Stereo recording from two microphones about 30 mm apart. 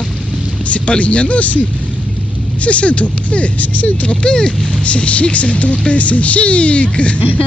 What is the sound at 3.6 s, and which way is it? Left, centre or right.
Speech, left.